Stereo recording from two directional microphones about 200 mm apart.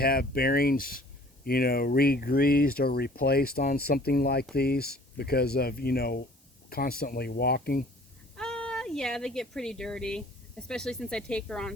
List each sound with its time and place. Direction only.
0.0 s speech: 50° left (ahead or behind)
8.4 s speech: 5° left (ahead or behind)